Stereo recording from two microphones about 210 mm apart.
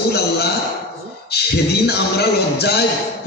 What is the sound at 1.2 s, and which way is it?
Speech, 50° left (ahead or behind).